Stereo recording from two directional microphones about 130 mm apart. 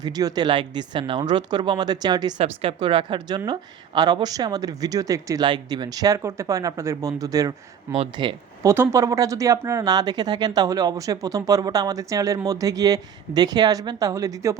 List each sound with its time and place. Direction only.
0.0 s speech: 30° right (ahead or behind)
2.4 s speech: 45° right (ahead or behind); by 7.5 s 25° right (ahead or behind)
8.2 s speech: 40° right (ahead or behind)
8.6 s speech: 20° right (ahead or behind)